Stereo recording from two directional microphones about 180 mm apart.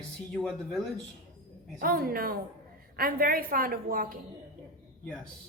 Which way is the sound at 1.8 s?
55° right (ahead or behind).